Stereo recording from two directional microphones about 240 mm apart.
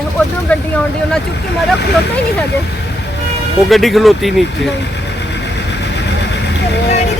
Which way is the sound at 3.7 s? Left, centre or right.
Centre.